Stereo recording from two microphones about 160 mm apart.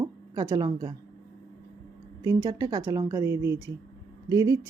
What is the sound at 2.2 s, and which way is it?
A woman's voice, 25° right (ahead or behind).